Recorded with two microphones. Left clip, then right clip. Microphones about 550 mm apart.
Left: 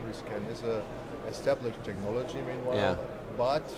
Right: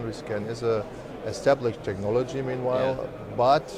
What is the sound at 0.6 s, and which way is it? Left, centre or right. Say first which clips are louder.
Speech: right 8 dB; right.